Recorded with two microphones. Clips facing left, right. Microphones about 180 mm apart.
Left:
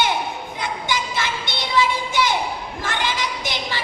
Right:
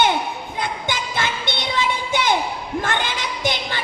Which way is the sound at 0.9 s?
55° right (ahead or behind).